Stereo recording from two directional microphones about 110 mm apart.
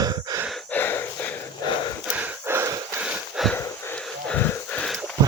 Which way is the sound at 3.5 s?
15° left (ahead or behind).